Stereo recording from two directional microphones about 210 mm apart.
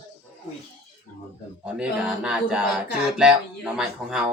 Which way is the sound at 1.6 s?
5° right (ahead or behind).